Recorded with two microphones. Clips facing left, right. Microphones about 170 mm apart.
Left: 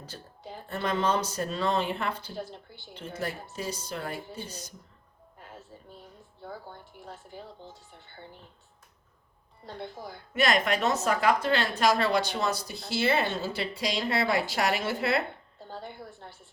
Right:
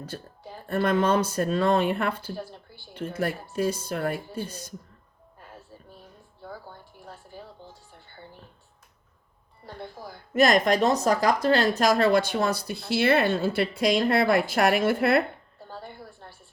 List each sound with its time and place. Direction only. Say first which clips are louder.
0.7 s speech: right 5 dB; 55° right (ahead or behind)
7.0 s speech: even; 20° left (ahead or behind)
9.6 s speech: even; 20° left (ahead or behind)
10.3 s speech: right 6 dB; 40° right (ahead or behind)
16.0 s a sound: left 1 dB; 20° left (ahead or behind)